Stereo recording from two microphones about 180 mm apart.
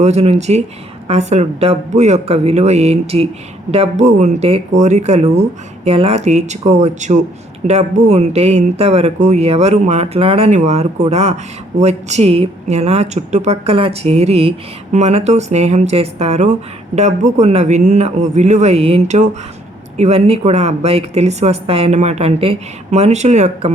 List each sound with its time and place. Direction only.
0.0 s speech: 35° right (ahead or behind)